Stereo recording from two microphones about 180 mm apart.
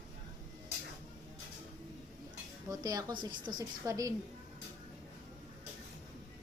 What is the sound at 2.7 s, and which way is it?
A woman's voice, 20° right (ahead or behind).